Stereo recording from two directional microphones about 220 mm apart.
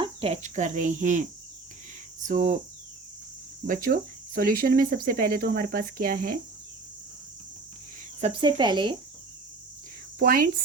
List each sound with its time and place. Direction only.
0.0 s speech: 25° right (ahead or behind)
3.7 s speech: 40° right (ahead or behind)
8.2 s speech: 25° right (ahead or behind)
10.2 s speech: 40° right (ahead or behind)